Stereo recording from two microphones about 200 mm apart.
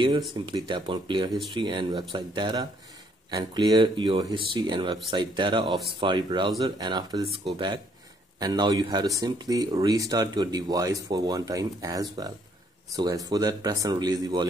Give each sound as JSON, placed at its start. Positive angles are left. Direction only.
{"t": 0.5, "sound": "speech", "side_deg": -20}